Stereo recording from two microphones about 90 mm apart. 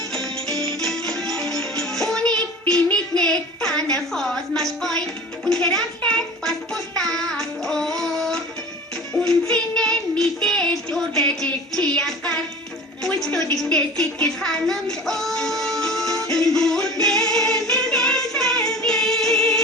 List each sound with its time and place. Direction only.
0.1 s music: 5° left (ahead or behind)
0.5 s music: 45° right (ahead or behind)
0.8 s music: 5° left (ahead or behind)
3.8 s a sound: 45° right (ahead or behind)
4.1 s a sound: 5° left (ahead or behind)
5.5 s speech: 5° left (ahead or behind)
6.0 s music: 10° left (ahead or behind)
9.2 s child singing: 10° left (ahead or behind)
13.5 s music: 10° left (ahead or behind)
17.3 s a capella: 5° left (ahead or behind)